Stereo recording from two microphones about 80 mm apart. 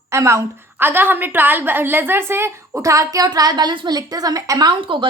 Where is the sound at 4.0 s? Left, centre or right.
Right.